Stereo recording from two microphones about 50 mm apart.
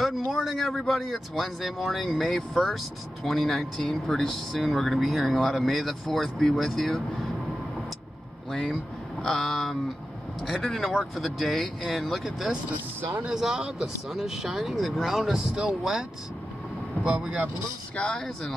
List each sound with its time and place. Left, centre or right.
0.3 s speech: centre
8.5 s a sound: centre
10.4 s speech: centre
13.3 s speech: centre
17.9 s speech: left